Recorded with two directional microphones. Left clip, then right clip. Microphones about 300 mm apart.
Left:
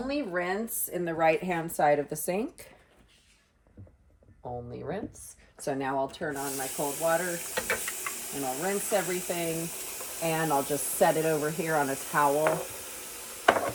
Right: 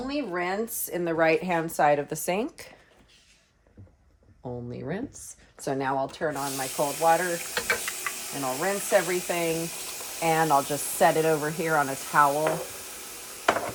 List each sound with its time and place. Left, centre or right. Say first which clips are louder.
0.1 s speech: right 1 dB; centre
4.7 s speech: right 2 dB; right
6.0 s a sound: right 3 dB; centre